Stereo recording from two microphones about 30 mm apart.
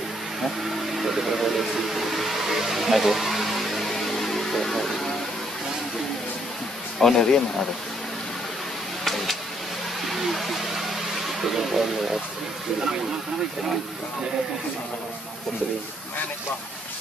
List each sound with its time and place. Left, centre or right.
0.9 s speech: centre
3.9 s music: centre
7.0 s speech: centre
9.0 s a sound: centre
11.4 s speech: centre